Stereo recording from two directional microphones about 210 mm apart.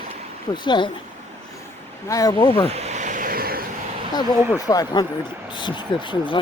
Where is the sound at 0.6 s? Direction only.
20° left (ahead or behind).